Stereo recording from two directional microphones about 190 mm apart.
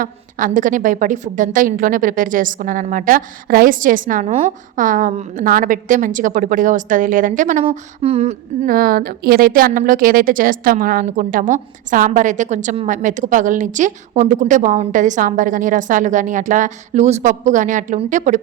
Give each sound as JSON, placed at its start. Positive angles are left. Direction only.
{"t": 0.0, "sound": "a woman's voice", "side_deg": -45}
{"t": 7.6, "sound": "a woman's voice", "side_deg": -30}